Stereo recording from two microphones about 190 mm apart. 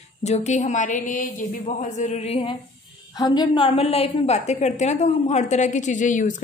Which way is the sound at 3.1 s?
20° left (ahead or behind).